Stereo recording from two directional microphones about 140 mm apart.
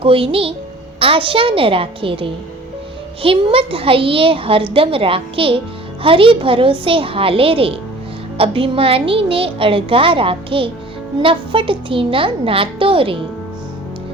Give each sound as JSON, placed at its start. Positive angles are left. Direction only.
{"t": 0.0, "sound": "a woman's voice", "side_deg": -40}